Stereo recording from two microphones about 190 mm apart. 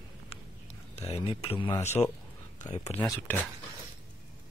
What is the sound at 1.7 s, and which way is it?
Speech, 10° left (ahead or behind).